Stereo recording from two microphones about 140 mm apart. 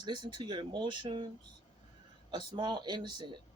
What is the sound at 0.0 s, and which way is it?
Speech, 35° right (ahead or behind).